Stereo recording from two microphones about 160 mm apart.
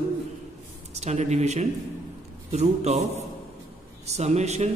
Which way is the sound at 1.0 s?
45° right (ahead or behind).